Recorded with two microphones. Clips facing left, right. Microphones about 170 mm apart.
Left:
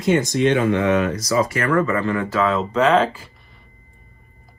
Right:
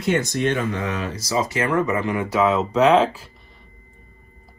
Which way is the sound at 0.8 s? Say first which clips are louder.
Left 8 dB; 30° right (ahead or behind).